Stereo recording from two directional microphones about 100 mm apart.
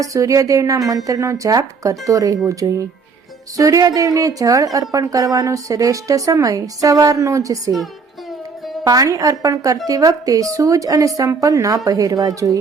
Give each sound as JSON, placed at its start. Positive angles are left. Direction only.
{"t": 0.0, "sound": "a woman's voice", "side_deg": -35}
{"t": 8.8, "sound": "a woman's voice", "side_deg": -35}